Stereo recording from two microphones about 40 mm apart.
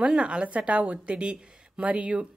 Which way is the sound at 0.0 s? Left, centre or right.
Right.